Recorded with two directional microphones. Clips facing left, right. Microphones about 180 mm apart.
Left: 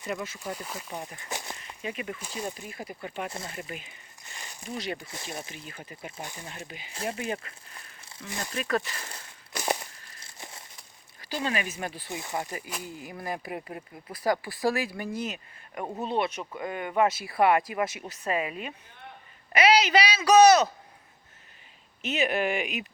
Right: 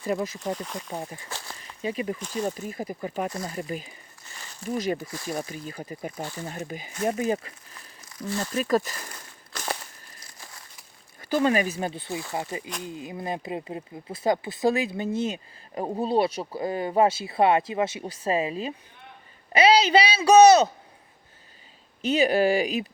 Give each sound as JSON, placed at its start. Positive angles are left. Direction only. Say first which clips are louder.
{"t": 0.0, "sound": "speech", "louder": "right 7 dB", "side_deg": -35}
{"t": 0.5, "sound": "speech", "louder": "right 5 dB", "side_deg": 5}
{"t": 0.9, "sound": "speech", "louder": "right 4 dB", "side_deg": -30}
{"t": 1.3, "sound": "a sound", "louder": "left 2 dB", "side_deg": 15}
{"t": 1.8, "sound": "speech", "louder": "right 7 dB", "side_deg": -30}
{"t": 5.0, "sound": "speech", "louder": "right 6 dB", "side_deg": 25}
{"t": 5.5, "sound": "speech", "louder": "right 7 dB", "side_deg": -35}
{"t": 9.5, "sound": "a sound", "louder": "left 3 dB", "side_deg": 15}
{"t": 10.2, "sound": "crumpling", "louder": "left 3 dB", "side_deg": 25}
{"t": 11.3, "sound": "speech", "louder": "right 8 dB", "side_deg": -50}
{"t": 11.6, "sound": "speech", "louder": "right 6 dB", "side_deg": -30}
{"t": 22.0, "sound": "speech", "louder": "right 6 dB", "side_deg": -30}